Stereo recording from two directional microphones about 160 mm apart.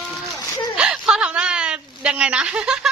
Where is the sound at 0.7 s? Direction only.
5° right (ahead or behind).